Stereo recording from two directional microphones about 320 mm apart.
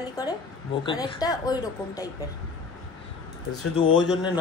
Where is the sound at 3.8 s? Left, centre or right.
Centre.